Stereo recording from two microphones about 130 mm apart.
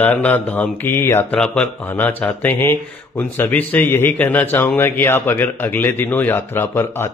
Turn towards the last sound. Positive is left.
turn(degrees=20)  # may be behind; listen again after turning